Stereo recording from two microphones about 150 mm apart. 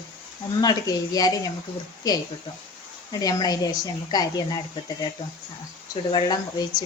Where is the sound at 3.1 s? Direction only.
25° left (ahead or behind).